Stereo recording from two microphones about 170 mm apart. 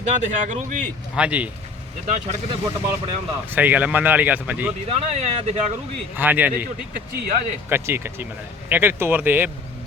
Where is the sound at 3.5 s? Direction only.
10° right (ahead or behind).